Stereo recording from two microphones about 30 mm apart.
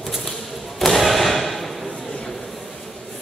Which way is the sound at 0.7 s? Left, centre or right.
Centre.